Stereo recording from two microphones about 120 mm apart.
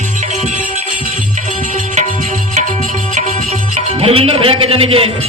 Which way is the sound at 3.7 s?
55° right (ahead or behind).